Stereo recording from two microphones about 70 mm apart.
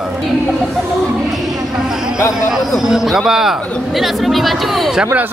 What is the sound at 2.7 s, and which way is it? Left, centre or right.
Speech, centre.